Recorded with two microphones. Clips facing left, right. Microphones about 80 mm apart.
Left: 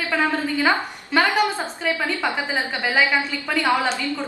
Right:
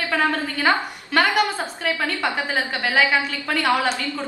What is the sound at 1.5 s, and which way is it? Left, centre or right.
Speech, centre.